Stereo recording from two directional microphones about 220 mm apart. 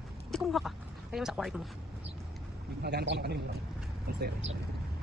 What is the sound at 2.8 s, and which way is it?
A man's voice, 50° right (ahead or behind).